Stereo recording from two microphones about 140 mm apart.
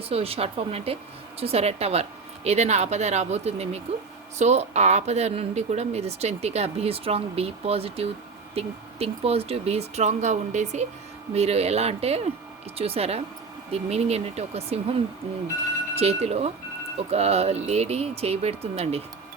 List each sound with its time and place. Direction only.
0.0 s speech: 45° right (ahead or behind)